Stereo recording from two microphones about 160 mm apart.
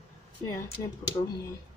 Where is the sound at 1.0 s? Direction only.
20° left (ahead or behind).